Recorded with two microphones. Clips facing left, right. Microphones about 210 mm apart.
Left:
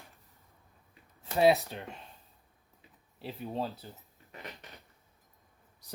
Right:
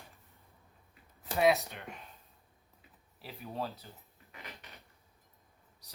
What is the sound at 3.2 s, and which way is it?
Speech, 25° left (ahead or behind).